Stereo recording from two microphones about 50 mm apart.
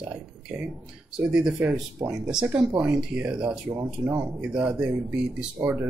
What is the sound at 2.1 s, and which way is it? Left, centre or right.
Speech, centre.